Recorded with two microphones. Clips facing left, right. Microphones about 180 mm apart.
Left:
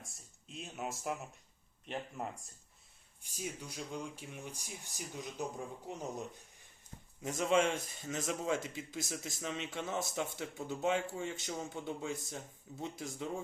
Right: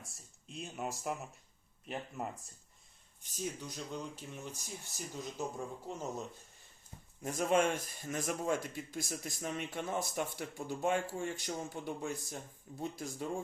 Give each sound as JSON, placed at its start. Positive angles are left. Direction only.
{"t": 0.0, "sound": "a sound", "side_deg": 0}
{"t": 1.9, "sound": "speech", "side_deg": 0}
{"t": 3.2, "sound": "speech", "side_deg": 10}
{"t": 7.4, "sound": "speech", "side_deg": -45}
{"t": 7.7, "sound": "speech", "side_deg": 25}
{"t": 9.6, "sound": "speech", "side_deg": -50}
{"t": 10.0, "sound": "speech", "side_deg": 25}